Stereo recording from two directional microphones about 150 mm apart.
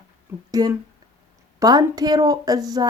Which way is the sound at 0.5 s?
25° right (ahead or behind).